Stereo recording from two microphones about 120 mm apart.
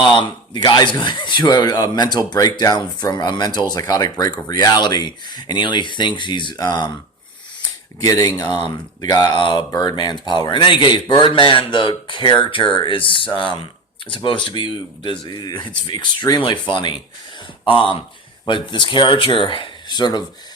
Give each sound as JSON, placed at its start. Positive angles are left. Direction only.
{"t": 0.0, "sound": "speech", "side_deg": 40}
{"t": 8.0, "sound": "speech", "side_deg": 30}